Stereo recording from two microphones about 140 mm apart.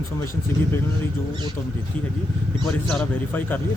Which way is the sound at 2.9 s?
10° left (ahead or behind).